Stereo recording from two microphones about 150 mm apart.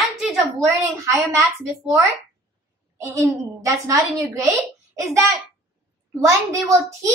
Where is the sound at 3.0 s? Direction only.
20° right (ahead or behind).